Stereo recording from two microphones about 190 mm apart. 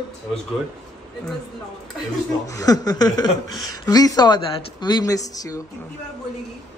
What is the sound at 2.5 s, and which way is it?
A woman's voice, 20° left (ahead or behind).